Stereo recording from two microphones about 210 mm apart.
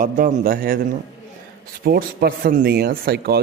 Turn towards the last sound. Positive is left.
turn(degrees=-50)  # may be behind; listen again after turning